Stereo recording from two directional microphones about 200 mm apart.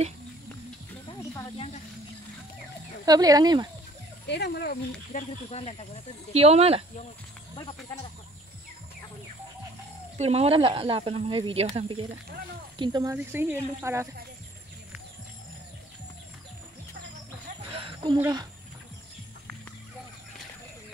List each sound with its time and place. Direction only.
3.1 s speech: 20° right (ahead or behind)
4.3 s speech: 55° left (ahead or behind)
5.1 s speech: 30° left (ahead or behind)
6.3 s speech: 30° right (ahead or behind)
7.5 s speech: 25° left (ahead or behind)
10.1 s speech: 30° right (ahead or behind)
13.1 s speech: 10° right (ahead or behind)
17.6 s a sound: 25° right (ahead or behind)
18.2 s speech: 20° right (ahead or behind)